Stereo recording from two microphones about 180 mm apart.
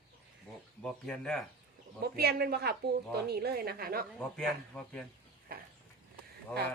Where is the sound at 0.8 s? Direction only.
5° left (ahead or behind).